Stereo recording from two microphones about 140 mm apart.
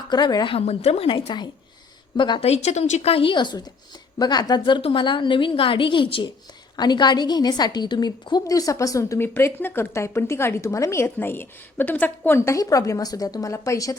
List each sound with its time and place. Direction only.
0.1 s a woman's voice: 30° left (ahead or behind)
0.5 s a woman's voice: 45° left (ahead or behind)
2.5 s a woman's voice: 50° left (ahead or behind); by 13.9 s 25° left (ahead or behind)